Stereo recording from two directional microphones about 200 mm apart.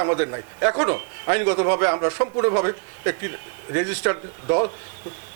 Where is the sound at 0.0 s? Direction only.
25° right (ahead or behind).